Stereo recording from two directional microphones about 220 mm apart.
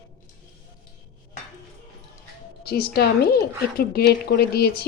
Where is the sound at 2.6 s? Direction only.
45° left (ahead or behind).